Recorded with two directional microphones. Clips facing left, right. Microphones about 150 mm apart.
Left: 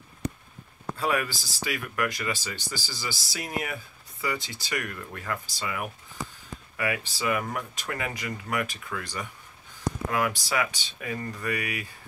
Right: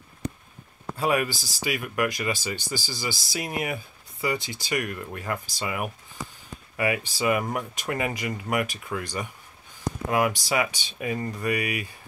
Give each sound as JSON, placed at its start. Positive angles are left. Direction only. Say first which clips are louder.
{"t": 0.9, "sound": "speech", "louder": "right 3 dB", "side_deg": -15}